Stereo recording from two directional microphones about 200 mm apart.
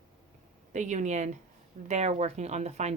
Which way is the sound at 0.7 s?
35° right (ahead or behind).